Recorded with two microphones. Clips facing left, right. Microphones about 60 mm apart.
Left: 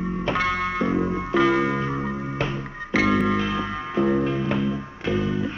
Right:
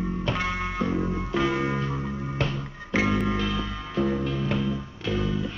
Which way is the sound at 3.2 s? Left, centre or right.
Centre.